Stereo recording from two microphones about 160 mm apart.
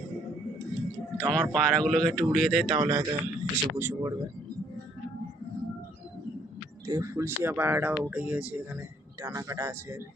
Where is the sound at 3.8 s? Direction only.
20° right (ahead or behind).